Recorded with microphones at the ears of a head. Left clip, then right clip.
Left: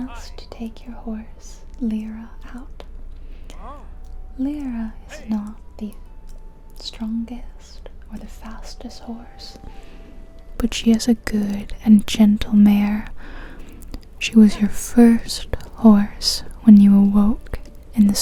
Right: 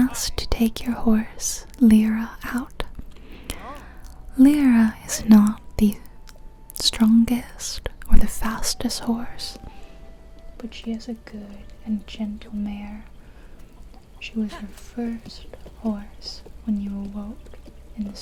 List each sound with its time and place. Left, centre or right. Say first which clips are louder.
0.0 s speech: right 10 dB; right
4.4 s speech: right 10 dB; right
10.6 s speech: left 13 dB; left